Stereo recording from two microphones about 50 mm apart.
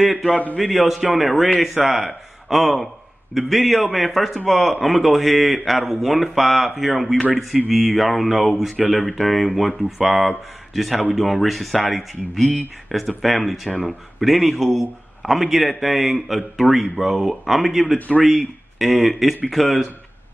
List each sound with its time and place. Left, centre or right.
0.6 s speech: centre
17.9 s speech: left
18.2 s speech: centre